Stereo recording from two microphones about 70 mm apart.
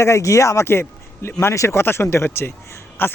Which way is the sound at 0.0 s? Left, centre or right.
Left.